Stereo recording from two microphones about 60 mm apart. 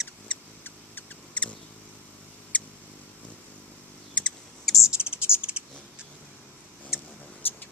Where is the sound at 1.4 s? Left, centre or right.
Centre.